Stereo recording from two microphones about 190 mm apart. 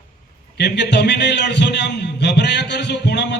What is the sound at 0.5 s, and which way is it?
A man's voice, 65° left (ahead or behind).